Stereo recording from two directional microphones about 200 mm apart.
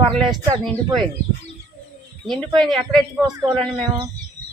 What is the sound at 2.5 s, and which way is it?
Speech, centre (ahead or behind).